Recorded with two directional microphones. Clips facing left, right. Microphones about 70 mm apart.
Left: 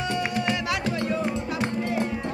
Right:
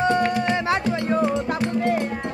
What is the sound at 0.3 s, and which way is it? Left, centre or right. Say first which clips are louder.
Music: right 5 dB; right.